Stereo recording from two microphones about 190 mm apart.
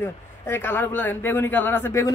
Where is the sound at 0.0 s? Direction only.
10° left (ahead or behind).